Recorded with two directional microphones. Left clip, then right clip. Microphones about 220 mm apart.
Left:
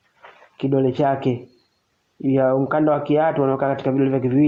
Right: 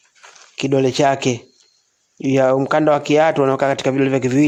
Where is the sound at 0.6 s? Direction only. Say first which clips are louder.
Right 4 dB; 45° right (ahead or behind).